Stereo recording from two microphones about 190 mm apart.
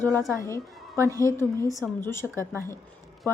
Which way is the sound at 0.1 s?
20° right (ahead or behind).